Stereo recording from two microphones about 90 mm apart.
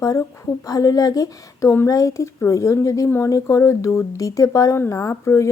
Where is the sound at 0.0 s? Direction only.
35° left (ahead or behind).